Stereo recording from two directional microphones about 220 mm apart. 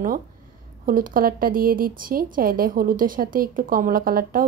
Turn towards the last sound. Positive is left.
turn(degrees=-40)  # may be behind; listen again after turning